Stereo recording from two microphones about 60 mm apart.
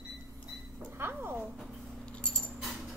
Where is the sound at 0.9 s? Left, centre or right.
Right.